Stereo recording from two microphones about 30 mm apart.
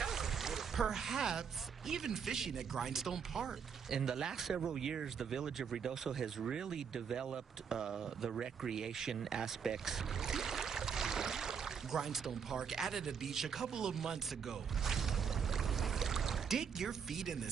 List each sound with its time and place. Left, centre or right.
0.0 s boat: centre
1.9 s speech: centre
4.4 s speech: centre
4.6 s speech: centre
15.5 s music: centre